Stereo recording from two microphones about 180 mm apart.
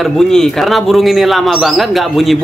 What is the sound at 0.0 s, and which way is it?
Speech, centre (ahead or behind).